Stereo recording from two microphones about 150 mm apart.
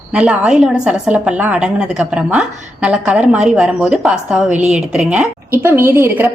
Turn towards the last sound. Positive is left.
turn(degrees=-15)  # may be behind; listen again after turning